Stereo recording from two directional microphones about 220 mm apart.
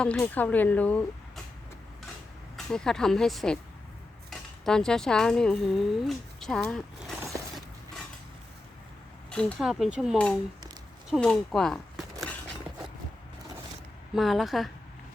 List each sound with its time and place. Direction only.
0.0 s speech: 5° left (ahead or behind)
2.7 s speech: 5° left (ahead or behind)
9.3 s speech: 5° left (ahead or behind)
14.2 s speech: centre (ahead or behind)